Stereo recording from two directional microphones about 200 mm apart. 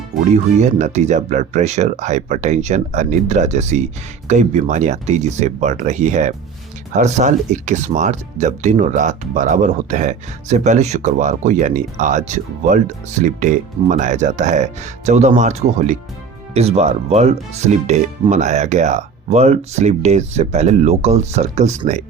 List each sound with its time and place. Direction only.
0.6 s speech: 35° right (ahead or behind)